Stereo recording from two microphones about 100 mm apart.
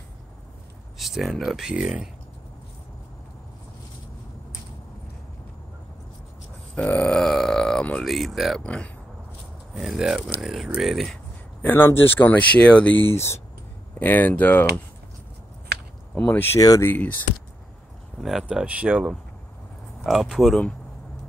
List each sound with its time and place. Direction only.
0.9 s a sound: centre (ahead or behind)
1.4 s speech: 5° right (ahead or behind)
6.7 s burping: 15° left (ahead or behind)
8.6 s speech: 10° left (ahead or behind)
9.8 s speech: 5° right (ahead or behind)
11.6 s speech: 20° left (ahead or behind)
13.1 s speech: 25° left (ahead or behind)
16.2 s speech: 20° left (ahead or behind)
16.5 s speech: 35° left (ahead or behind)
16.8 s speech: 20° left (ahead or behind)
18.2 s speech: 5° right (ahead or behind)